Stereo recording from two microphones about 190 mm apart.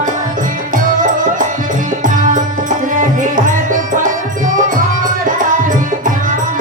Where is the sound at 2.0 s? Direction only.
40° right (ahead or behind).